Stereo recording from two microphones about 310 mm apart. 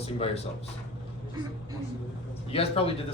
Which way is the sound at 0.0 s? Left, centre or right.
Centre.